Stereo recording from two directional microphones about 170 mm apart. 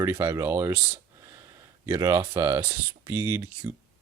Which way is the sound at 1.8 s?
20° right (ahead or behind).